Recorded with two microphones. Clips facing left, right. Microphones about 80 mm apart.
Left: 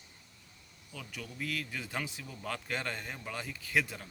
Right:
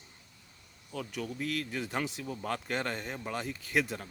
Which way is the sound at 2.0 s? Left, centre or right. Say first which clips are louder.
Right 4 dB; right.